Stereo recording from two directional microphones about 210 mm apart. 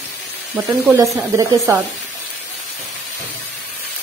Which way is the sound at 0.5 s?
15° right (ahead or behind).